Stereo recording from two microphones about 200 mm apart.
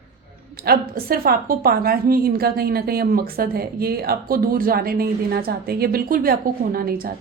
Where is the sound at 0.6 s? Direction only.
50° right (ahead or behind).